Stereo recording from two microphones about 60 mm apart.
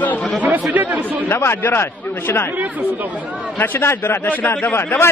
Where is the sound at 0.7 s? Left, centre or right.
Right.